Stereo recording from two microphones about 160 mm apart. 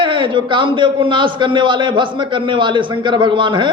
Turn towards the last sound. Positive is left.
turn(degrees=-30)  # may be behind; listen again after turning